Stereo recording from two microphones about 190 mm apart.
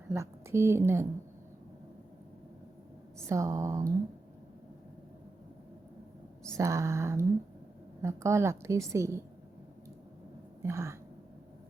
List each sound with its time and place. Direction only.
0.1 s a woman's voice: 15° right (ahead or behind)
3.2 s a woman's voice: 15° right (ahead or behind)
6.6 s a woman's voice: 15° right (ahead or behind)
10.6 s speech: 15° right (ahead or behind)